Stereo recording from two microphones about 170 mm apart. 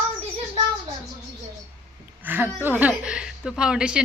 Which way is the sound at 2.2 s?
10° right (ahead or behind).